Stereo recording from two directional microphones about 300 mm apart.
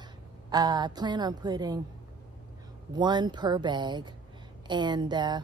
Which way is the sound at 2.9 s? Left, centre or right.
Centre.